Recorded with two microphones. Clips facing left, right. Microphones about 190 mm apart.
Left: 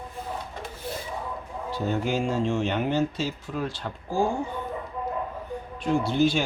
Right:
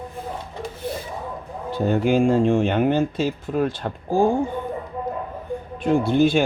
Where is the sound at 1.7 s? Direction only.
55° right (ahead or behind).